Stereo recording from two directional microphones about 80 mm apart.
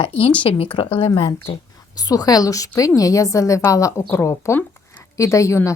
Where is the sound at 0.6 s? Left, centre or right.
Left.